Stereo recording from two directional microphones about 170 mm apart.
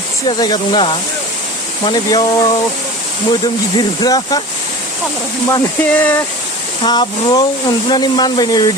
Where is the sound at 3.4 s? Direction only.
25° left (ahead or behind).